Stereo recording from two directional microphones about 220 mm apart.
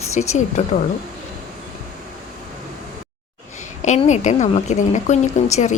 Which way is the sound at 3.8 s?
35° left (ahead or behind).